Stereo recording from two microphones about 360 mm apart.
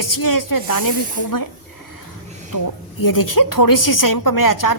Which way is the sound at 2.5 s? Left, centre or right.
Left.